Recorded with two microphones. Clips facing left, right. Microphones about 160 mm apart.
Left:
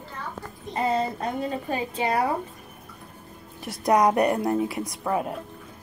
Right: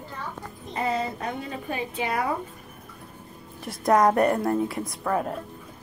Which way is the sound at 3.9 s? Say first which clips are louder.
Even; 15° left (ahead or behind).